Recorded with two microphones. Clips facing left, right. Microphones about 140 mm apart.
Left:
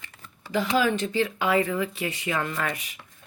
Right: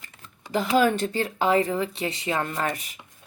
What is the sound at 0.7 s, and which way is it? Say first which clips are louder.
Speech: right 3 dB; 45° right (ahead or behind).